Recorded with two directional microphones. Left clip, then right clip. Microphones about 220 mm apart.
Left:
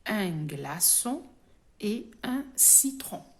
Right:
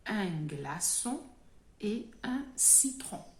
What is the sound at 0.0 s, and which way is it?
Speech, 45° left (ahead or behind).